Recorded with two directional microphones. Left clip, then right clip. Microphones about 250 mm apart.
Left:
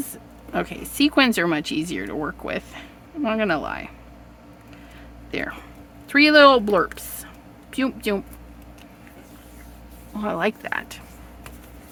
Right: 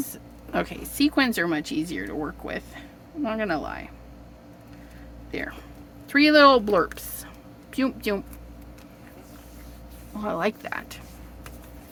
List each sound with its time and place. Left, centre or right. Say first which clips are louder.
0.1 s speech: left 1 dB; centre
5.3 s speech: left 4 dB; centre
10.2 s speech: left 3 dB; centre